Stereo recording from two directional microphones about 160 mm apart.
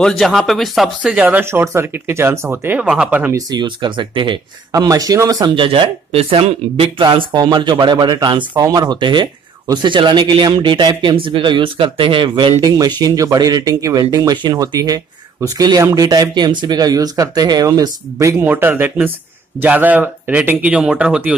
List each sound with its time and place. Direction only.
0.0 s speech: centre (ahead or behind)
3.3 s speech: 25° right (ahead or behind)
5.7 s speech: 35° right (ahead or behind); by 21.4 s 5° right (ahead or behind)